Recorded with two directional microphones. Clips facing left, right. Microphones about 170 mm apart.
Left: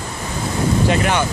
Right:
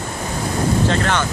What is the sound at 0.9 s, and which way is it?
Speech, 15° left (ahead or behind).